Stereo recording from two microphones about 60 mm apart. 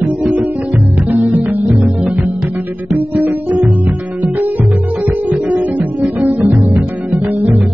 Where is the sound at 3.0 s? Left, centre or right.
Right.